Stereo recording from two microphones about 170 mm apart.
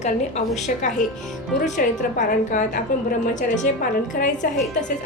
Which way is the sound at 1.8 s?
55° left (ahead or behind).